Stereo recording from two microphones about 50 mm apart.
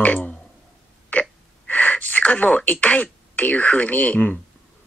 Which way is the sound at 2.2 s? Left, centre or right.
Left.